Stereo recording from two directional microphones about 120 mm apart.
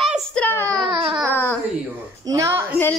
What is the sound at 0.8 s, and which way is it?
Baby cry, 45° right (ahead or behind).